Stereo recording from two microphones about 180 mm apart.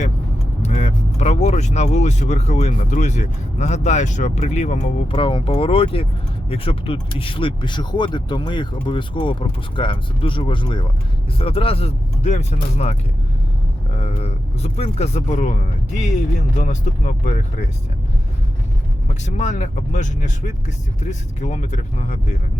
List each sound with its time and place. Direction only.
0.6 s speech: 35° left (ahead or behind)
19.0 s speech: 40° left (ahead or behind)